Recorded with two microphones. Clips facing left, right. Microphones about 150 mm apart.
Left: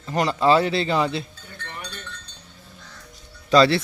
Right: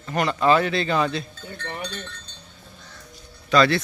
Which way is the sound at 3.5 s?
30° left (ahead or behind).